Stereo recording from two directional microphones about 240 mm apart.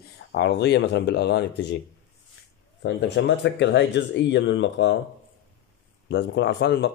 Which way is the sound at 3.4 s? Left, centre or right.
Left.